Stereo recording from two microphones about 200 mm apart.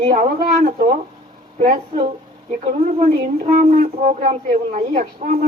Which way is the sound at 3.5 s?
45° right (ahead or behind).